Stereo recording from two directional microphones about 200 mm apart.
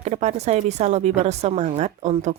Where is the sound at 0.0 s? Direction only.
35° right (ahead or behind).